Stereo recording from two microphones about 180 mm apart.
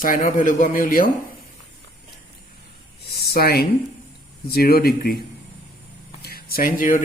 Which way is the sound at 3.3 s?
60° left (ahead or behind).